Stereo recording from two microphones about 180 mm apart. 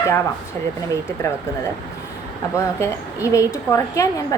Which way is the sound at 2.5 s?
15° left (ahead or behind).